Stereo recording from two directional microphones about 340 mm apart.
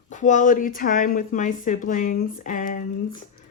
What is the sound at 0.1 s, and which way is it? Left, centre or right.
Speech, left.